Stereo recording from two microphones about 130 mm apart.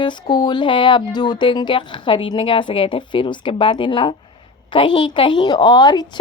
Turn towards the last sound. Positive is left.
turn(degrees=30)  # may be behind; listen again after turning